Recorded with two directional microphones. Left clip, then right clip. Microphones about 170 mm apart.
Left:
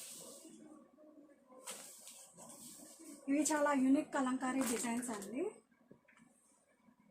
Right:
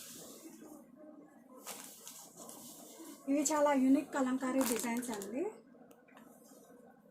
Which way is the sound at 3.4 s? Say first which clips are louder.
Right 3 dB; 20° left (ahead or behind).